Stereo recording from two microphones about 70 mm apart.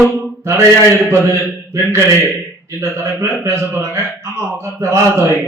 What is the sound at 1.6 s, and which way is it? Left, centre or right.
A man's voice, right.